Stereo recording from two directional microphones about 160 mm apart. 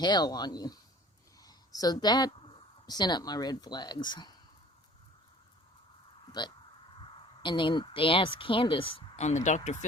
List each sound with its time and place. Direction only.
0.0 s a woman's voice: 25° left (ahead or behind)
7.0 s speech: 30° left (ahead or behind); by 9.6 s 45° left (ahead or behind)